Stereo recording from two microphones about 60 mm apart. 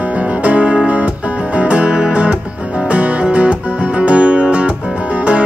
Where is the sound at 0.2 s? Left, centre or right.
Right.